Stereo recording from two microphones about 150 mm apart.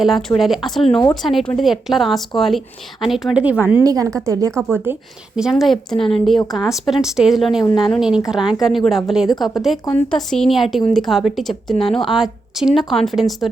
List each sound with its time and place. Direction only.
0.0 s a woman's voice: centre (ahead or behind)
3.8 s a woman's voice: 20° right (ahead or behind)
5.4 s a woman's voice: centre (ahead or behind)